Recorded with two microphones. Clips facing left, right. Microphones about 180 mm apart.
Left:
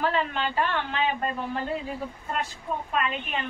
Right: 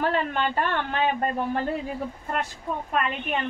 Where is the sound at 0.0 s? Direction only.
50° right (ahead or behind).